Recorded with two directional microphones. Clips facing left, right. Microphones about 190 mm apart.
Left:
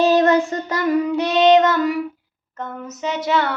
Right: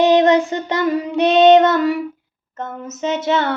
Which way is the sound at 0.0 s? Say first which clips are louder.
Right 2 dB; 20° right (ahead or behind).